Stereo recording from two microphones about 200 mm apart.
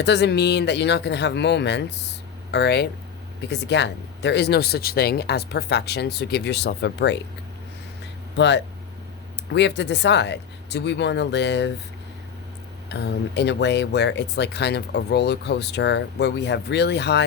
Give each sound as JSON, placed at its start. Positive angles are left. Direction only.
{"t": 0.0, "sound": "speech", "side_deg": 55}
{"t": 8.4, "sound": "speech", "side_deg": 60}
{"t": 12.9, "sound": "speech", "side_deg": 60}